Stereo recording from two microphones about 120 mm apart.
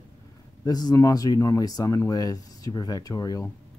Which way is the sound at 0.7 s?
35° left (ahead or behind).